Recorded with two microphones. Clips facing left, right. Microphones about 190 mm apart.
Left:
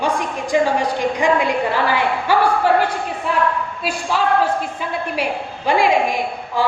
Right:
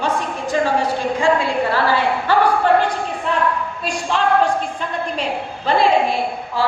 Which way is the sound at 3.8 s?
5° left (ahead or behind).